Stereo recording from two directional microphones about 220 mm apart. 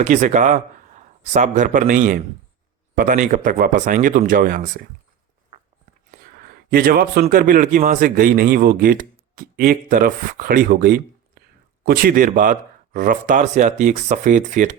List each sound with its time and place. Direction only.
0.0 s speech: 35° right (ahead or behind)
6.1 s speech: 40° right (ahead or behind)